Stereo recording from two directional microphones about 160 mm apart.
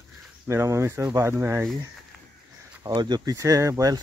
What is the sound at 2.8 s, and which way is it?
Speech, 25° right (ahead or behind).